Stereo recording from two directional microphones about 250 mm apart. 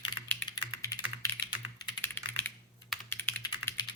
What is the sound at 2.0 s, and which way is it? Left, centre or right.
Computer keyboard, centre.